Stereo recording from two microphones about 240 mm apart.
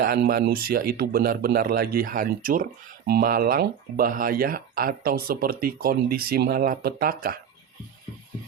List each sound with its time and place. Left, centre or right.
0.0 s speech: right